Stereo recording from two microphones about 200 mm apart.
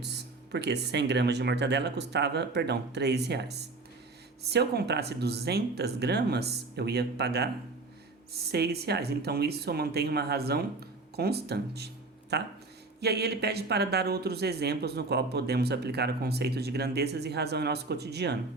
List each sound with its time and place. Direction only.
0.0 s speech: 55° right (ahead or behind)